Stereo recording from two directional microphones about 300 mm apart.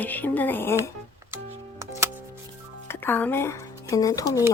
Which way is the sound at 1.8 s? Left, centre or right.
Centre.